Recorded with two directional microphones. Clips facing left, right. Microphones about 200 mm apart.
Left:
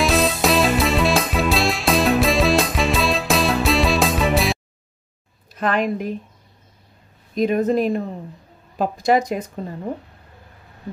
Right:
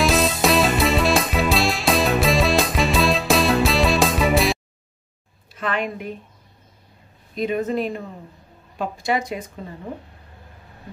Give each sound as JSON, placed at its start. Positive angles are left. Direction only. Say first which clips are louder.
{"t": 0.0, "sound": "music", "louder": "even", "side_deg": 0}
{"t": 5.5, "sound": "a woman's voice", "louder": "left 5 dB", "side_deg": 40}
{"t": 7.3, "sound": "speech", "louder": "left 4 dB", "side_deg": 40}